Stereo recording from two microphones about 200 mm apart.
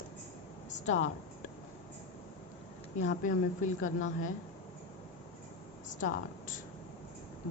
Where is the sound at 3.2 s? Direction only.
40° left (ahead or behind).